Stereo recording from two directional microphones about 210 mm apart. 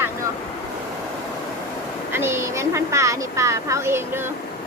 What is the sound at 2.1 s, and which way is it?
Speech, 10° right (ahead or behind).